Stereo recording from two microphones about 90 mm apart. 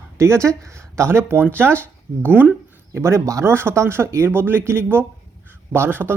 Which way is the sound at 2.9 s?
30° right (ahead or behind).